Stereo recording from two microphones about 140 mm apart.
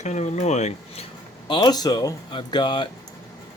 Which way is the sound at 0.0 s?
55° left (ahead or behind).